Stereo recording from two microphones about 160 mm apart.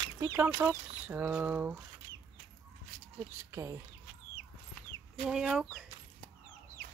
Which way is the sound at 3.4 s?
15° right (ahead or behind).